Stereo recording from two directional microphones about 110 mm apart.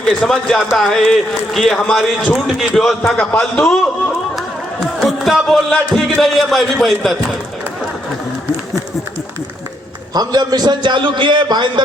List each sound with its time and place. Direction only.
0.0 s a man's voice: 5° left (ahead or behind)
4.9 s speech: centre (ahead or behind)
10.2 s a man's voice: 35° right (ahead or behind)